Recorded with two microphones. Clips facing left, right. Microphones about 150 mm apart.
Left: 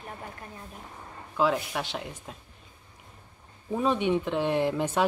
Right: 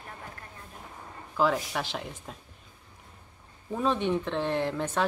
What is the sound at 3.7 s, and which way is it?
Speech, 10° left (ahead or behind).